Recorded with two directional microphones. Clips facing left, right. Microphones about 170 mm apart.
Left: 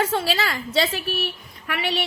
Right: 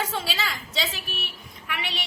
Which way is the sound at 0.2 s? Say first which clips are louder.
Left 6 dB; 60° left (ahead or behind).